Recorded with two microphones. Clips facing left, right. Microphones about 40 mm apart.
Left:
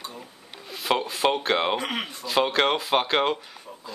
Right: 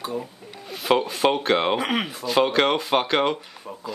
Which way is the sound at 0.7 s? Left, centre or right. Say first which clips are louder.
Right 4 dB; centre.